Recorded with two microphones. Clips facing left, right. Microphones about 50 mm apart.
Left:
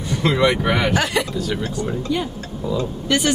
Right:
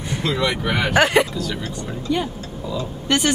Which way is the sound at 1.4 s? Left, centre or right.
Left.